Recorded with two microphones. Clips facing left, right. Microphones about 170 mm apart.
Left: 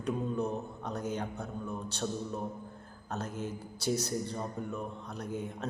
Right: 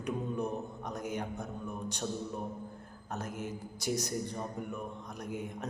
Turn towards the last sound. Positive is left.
turn(degrees=-15)  # may be behind; listen again after turning